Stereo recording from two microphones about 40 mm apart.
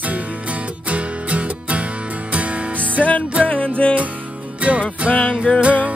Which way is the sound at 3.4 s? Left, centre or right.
Left.